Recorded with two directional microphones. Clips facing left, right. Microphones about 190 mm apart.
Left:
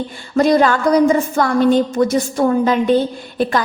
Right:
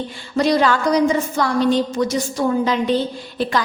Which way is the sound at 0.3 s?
50° left (ahead or behind).